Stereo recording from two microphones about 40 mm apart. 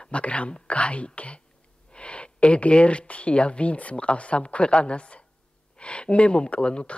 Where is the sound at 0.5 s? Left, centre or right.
Left.